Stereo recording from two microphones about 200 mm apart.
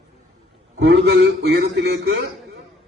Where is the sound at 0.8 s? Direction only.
60° right (ahead or behind).